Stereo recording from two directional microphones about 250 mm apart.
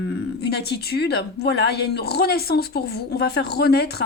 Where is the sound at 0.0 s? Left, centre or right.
Left.